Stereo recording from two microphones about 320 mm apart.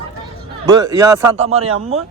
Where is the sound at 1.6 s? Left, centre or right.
Right.